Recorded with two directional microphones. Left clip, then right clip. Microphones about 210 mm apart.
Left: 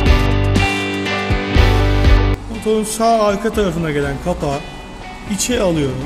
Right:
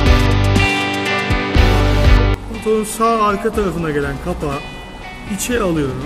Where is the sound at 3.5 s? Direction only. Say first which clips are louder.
Left 1 dB; 25° left (ahead or behind).